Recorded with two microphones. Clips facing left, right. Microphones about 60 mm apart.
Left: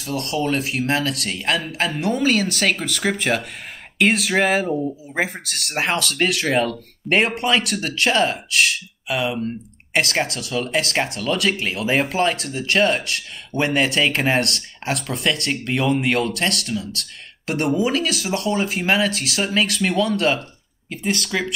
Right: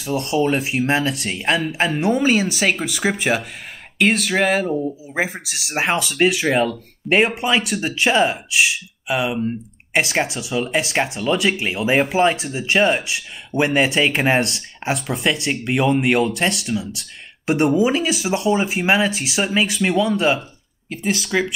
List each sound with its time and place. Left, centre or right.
0.1 s speech: right
2.0 s speech: centre
4.0 s speech: centre